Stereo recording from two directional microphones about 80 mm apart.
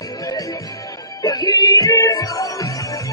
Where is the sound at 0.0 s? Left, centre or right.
Left.